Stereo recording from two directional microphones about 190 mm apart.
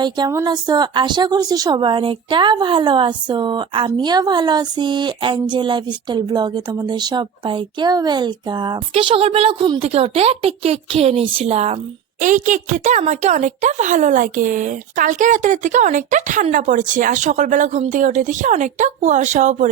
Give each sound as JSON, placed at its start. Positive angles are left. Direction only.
{"t": 0.0, "sound": "a woman's voice", "side_deg": -20}